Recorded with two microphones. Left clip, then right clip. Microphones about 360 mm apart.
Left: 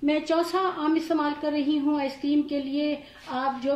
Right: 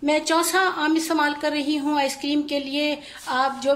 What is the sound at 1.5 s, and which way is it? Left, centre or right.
Speech, right.